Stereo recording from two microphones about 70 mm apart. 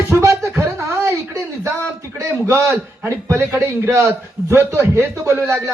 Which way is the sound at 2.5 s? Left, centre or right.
Right.